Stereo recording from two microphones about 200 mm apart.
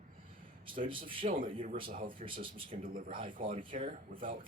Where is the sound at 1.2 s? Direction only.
45° right (ahead or behind).